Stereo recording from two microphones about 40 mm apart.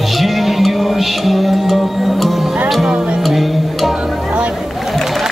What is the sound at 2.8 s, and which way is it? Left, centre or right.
Music, right.